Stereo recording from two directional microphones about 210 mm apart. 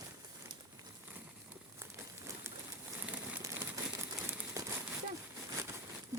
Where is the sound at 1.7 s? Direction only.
15° right (ahead or behind).